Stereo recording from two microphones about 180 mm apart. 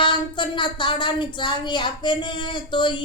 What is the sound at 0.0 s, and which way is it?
Speech, 25° left (ahead or behind).